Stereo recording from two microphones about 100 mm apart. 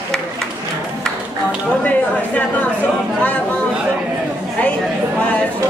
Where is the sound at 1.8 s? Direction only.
15° left (ahead or behind).